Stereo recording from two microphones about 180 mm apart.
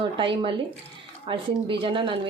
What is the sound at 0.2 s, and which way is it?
Speech, 25° right (ahead or behind).